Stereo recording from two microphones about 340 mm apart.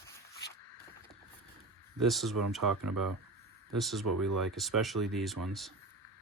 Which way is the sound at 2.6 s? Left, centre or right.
Right.